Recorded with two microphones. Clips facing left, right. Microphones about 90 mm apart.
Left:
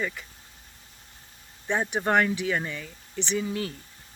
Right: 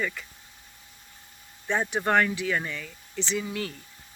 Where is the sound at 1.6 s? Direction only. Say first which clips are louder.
Even; 15° left (ahead or behind).